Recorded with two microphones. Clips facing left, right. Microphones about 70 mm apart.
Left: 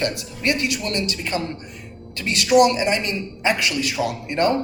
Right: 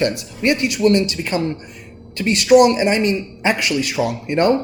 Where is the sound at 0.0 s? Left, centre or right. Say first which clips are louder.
Right 5 dB; right.